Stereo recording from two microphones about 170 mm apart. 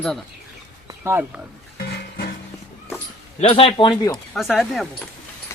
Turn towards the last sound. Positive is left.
turn(degrees=0)  # may be behind; listen again after turning